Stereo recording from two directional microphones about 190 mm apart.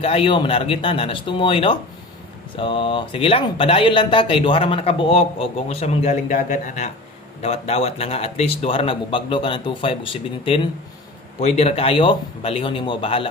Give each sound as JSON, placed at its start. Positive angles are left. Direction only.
{"t": 0.0, "sound": "speech", "side_deg": 30}